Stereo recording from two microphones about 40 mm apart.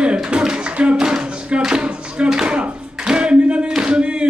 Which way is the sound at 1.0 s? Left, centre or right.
Centre.